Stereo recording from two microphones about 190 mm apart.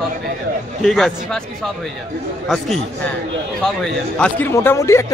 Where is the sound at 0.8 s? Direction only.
Centre (ahead or behind).